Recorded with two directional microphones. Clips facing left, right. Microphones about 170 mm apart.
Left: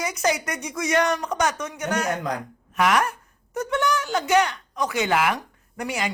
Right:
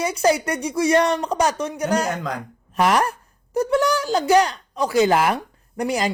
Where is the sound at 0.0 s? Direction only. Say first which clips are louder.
Right 5 dB; 30° right (ahead or behind).